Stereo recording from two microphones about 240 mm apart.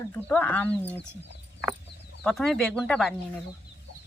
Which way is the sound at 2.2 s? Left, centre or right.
Centre.